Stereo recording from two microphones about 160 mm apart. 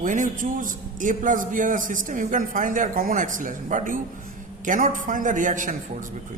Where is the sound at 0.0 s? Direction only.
55° right (ahead or behind).